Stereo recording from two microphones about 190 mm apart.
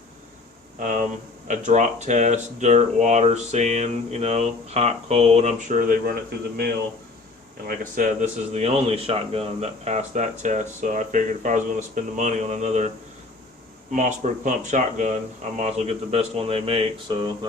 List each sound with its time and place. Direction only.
0.8 s speech: 40° right (ahead or behind)
7.7 s speech: 45° right (ahead or behind)
13.9 s a man's voice: 40° right (ahead or behind); by 17.2 s 25° right (ahead or behind)